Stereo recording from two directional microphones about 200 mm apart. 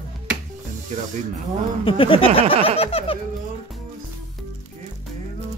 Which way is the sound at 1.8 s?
25° left (ahead or behind).